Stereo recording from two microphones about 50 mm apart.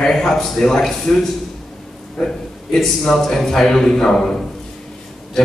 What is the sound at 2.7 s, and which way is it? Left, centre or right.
A man's voice, centre.